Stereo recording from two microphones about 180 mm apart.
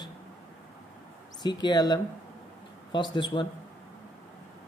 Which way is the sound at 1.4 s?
25° left (ahead or behind).